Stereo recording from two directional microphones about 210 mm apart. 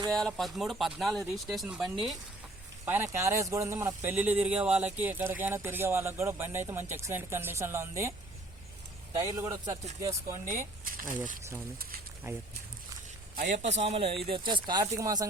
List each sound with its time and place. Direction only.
0.2 s speech: centre (ahead or behind)
9.1 s speech: 15° right (ahead or behind)
10.5 s speech: 40° right (ahead or behind)
12.3 s speech: 15° right (ahead or behind)
13.3 s a man's voice: 35° right (ahead or behind); by 15.3 s 15° right (ahead or behind)